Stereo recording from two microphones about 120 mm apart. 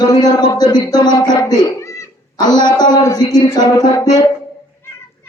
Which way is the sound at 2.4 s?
35° left (ahead or behind).